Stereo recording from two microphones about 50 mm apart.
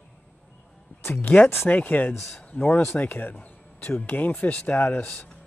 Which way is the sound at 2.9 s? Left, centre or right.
Left.